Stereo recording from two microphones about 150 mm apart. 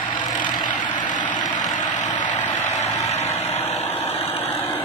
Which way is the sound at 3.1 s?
45° left (ahead or behind).